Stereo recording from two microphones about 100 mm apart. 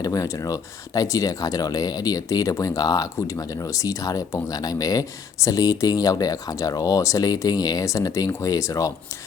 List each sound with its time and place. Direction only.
0.0 s speech: 35° left (ahead or behind)